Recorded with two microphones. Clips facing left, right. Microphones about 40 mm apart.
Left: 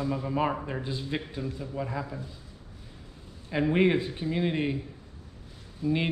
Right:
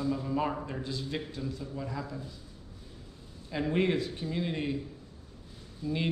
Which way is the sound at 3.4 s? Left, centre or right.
Left.